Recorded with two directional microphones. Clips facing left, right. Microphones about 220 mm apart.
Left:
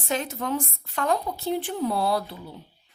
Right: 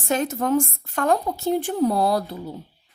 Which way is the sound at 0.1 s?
45° right (ahead or behind).